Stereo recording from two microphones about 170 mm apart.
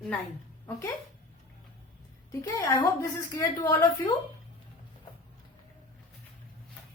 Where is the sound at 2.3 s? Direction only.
15° left (ahead or behind).